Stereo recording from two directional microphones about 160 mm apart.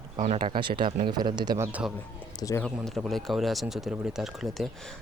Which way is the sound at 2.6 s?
Centre (ahead or behind).